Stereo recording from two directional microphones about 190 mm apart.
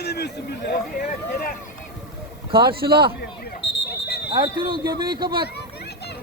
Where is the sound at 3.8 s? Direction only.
60° left (ahead or behind).